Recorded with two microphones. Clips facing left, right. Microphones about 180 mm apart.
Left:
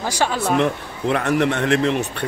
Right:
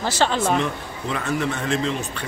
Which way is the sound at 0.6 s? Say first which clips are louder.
Left 5 dB; 65° left (ahead or behind).